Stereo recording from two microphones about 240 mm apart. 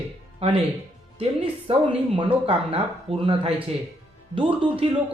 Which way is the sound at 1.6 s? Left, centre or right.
Right.